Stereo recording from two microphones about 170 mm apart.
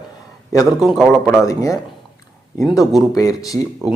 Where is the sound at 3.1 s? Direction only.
20° left (ahead or behind).